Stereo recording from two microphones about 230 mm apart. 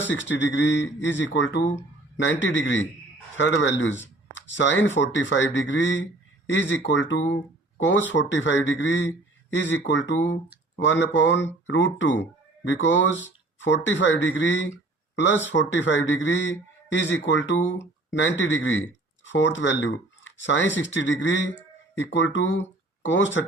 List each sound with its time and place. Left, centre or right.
0.1 s a man's voice: left